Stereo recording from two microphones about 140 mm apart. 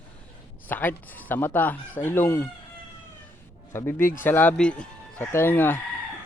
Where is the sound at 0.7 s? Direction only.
15° left (ahead or behind).